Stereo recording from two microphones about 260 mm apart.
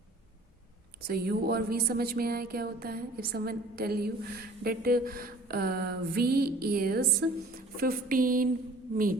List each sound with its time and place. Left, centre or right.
1.0 s speech: right